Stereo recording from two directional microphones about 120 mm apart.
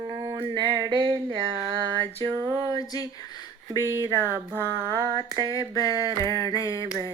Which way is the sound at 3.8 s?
25° left (ahead or behind).